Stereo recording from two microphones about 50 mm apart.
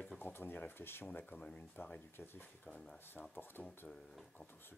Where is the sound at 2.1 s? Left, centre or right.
Left.